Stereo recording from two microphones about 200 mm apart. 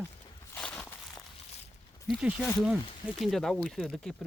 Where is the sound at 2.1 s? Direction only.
5° right (ahead or behind).